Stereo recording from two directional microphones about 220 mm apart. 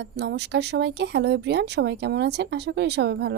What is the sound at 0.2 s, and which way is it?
Speech, 50° right (ahead or behind).